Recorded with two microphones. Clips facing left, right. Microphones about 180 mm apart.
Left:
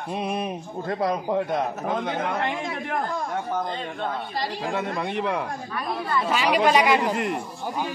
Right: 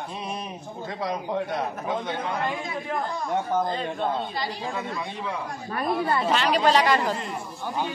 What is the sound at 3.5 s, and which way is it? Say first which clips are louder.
Speech: right 3 dB; 5° right (ahead or behind).